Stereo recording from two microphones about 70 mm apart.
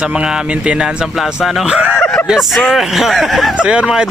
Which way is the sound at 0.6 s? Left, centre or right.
Centre.